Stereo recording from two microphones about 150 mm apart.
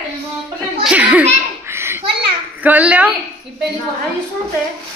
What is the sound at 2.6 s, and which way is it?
Speech, 10° right (ahead or behind).